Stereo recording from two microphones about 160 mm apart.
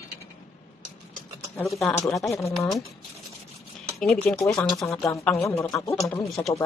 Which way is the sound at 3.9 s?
Centre (ahead or behind).